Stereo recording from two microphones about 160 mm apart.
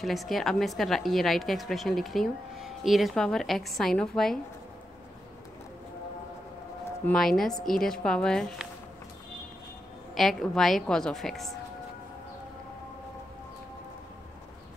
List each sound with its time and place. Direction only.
0.0 s a woman's voice: centre (ahead or behind)
7.1 s a woman's voice: centre (ahead or behind)
10.1 s a woman's voice: centre (ahead or behind)